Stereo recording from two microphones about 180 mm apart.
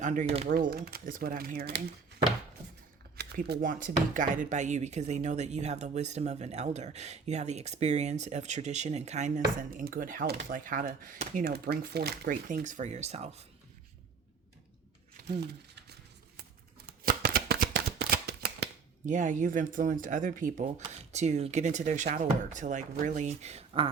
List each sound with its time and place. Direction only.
0.0 s speech: 45° right (ahead or behind)
0.4 s speech: 55° right (ahead or behind)
3.2 s speech: 65° right (ahead or behind); by 13.4 s 35° right (ahead or behind)
15.2 s crumpling: 65° right (ahead or behind)
16.4 s shuffling cards: 55° right (ahead or behind)
19.0 s speech: 45° right (ahead or behind)